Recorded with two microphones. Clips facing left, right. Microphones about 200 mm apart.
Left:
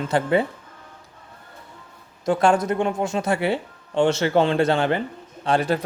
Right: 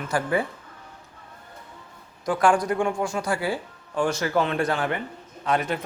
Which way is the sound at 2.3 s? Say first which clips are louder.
Left 2 dB; 25° left (ahead or behind).